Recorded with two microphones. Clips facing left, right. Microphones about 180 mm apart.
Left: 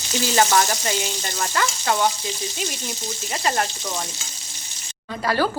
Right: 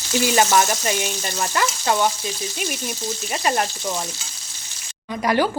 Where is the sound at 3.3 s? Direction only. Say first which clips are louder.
Right 1 dB; 20° right (ahead or behind).